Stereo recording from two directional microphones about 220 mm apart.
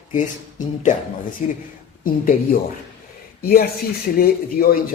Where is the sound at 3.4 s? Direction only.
45° left (ahead or behind).